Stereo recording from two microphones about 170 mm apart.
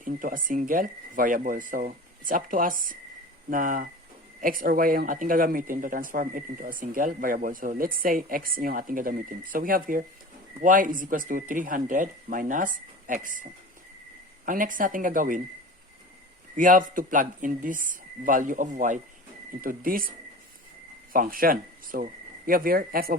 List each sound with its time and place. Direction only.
0.0 s speech: 55° right (ahead or behind)
14.4 s speech: 50° right (ahead or behind)
16.6 s speech: 50° right (ahead or behind)